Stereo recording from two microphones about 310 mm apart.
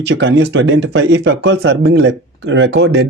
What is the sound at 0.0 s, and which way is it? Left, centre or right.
Speech, right.